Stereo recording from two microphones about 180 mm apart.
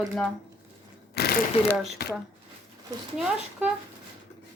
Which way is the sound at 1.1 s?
65° left (ahead or behind).